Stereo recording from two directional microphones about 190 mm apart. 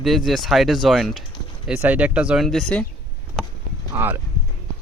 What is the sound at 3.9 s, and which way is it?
Speech, 10° right (ahead or behind).